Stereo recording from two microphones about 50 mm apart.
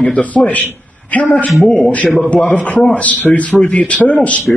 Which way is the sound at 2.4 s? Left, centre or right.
Left.